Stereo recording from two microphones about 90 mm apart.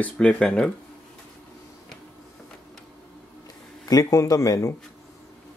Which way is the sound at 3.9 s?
35° left (ahead or behind).